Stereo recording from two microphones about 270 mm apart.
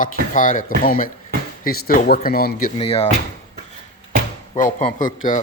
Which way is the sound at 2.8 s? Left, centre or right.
Left.